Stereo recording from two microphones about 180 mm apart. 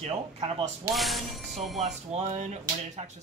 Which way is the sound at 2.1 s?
40° right (ahead or behind).